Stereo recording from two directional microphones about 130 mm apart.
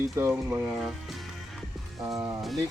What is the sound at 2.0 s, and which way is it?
Speech, 25° right (ahead or behind).